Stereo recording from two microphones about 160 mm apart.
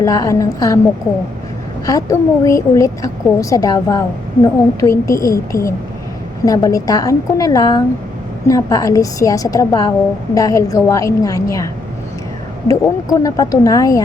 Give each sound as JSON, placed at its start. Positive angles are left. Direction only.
{"t": 0.0, "sound": "a woman's voice", "side_deg": 20}
{"t": 1.9, "sound": "a woman's voice", "side_deg": 20}
{"t": 12.6, "sound": "a woman's voice", "side_deg": 20}